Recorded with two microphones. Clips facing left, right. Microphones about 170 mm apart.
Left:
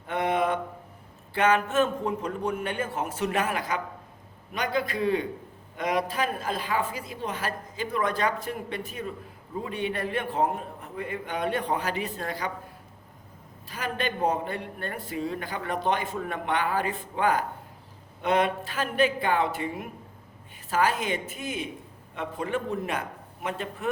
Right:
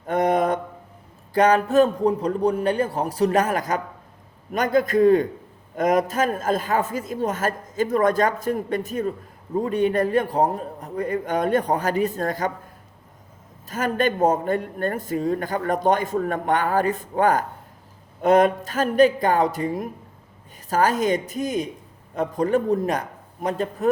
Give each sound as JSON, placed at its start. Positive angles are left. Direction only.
{"t": 0.1, "sound": "mantra", "side_deg": -40}
{"t": 1.3, "sound": "a man's voice", "side_deg": -40}
{"t": 13.7, "sound": "a man's voice", "side_deg": -45}